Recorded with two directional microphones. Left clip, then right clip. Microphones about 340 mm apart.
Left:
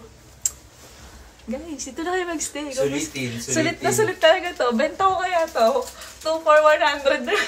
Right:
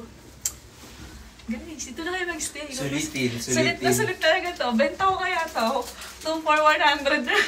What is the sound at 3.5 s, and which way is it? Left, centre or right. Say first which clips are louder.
A woman's voice: left 1 dB; centre.